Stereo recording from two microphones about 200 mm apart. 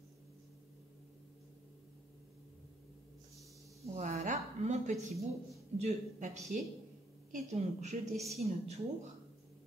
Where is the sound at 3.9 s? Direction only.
35° right (ahead or behind).